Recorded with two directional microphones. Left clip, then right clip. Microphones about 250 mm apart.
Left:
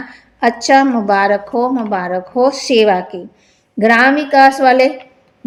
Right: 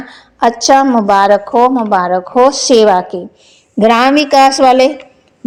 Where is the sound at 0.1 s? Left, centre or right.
Centre.